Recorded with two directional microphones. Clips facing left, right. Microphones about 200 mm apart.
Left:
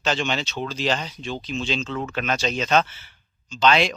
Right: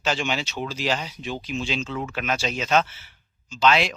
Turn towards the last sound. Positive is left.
turn(degrees=-5)  # may be behind; listen again after turning